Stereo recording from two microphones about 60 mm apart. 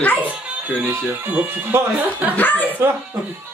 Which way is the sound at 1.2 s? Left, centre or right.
Right.